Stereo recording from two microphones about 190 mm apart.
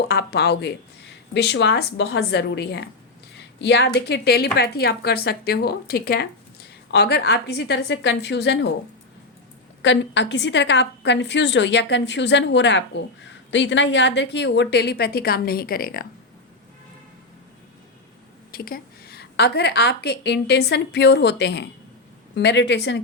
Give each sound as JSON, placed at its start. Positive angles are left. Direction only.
{"t": 0.1, "sound": "a woman's voice", "side_deg": 60}
{"t": 9.8, "sound": "a woman's voice", "side_deg": 70}
{"t": 18.5, "sound": "a woman's voice", "side_deg": 50}